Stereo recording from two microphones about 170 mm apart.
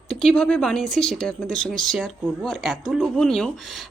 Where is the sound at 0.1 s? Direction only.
Centre (ahead or behind).